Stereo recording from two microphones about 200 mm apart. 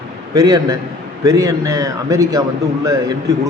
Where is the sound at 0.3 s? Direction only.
20° right (ahead or behind).